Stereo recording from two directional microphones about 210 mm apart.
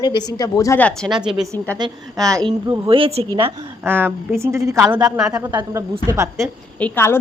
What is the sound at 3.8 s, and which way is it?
Speech, 10° right (ahead or behind).